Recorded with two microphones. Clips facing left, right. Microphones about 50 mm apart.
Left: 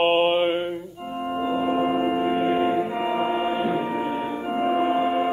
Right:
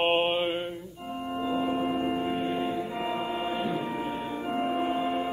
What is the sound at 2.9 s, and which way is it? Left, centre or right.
Music, centre.